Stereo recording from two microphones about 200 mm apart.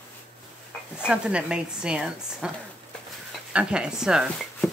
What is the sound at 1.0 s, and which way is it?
Speech, 5° right (ahead or behind).